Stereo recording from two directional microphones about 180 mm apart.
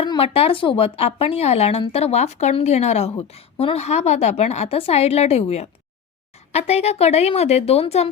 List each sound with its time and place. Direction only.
0.0 s speech: 30° left (ahead or behind)